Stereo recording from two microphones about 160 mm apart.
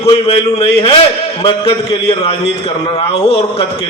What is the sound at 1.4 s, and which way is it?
A man's voice, 30° left (ahead or behind).